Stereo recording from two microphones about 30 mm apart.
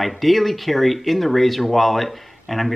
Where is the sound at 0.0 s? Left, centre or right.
Centre.